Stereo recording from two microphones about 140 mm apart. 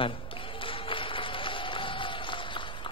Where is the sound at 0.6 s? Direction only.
40° left (ahead or behind).